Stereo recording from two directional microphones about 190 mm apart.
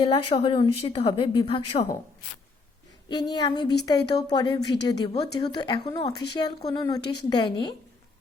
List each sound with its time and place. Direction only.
0.0 s a woman's voice: 30° left (ahead or behind)
3.1 s a woman's voice: 20° left (ahead or behind)